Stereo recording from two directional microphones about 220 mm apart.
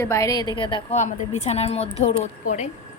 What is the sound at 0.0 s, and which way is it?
A woman's voice, 15° left (ahead or behind).